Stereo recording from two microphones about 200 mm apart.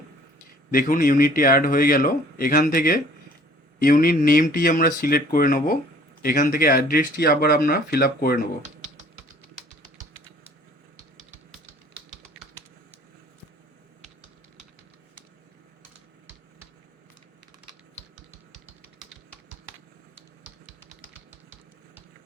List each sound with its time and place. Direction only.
0.7 s a man's voice: 45° left (ahead or behind)